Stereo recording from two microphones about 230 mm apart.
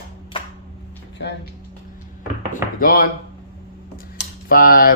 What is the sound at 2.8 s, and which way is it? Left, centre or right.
Speech, left.